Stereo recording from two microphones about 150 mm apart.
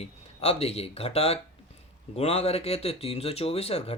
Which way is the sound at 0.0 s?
40° left (ahead or behind).